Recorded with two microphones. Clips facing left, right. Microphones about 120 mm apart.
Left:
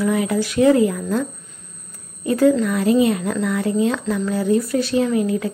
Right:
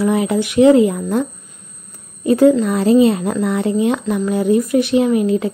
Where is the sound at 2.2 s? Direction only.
20° right (ahead or behind).